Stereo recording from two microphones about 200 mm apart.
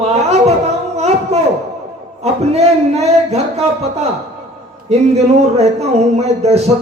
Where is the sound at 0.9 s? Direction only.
30° right (ahead or behind).